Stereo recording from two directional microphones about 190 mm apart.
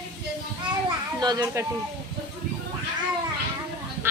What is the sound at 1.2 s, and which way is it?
Speech, 20° right (ahead or behind).